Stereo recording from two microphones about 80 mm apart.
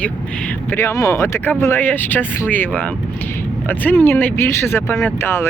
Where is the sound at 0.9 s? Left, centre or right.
Left.